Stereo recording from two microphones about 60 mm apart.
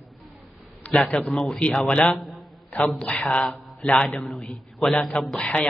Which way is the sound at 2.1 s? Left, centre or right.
Centre.